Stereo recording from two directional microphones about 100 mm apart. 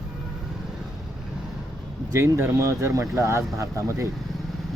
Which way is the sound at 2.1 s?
25° right (ahead or behind).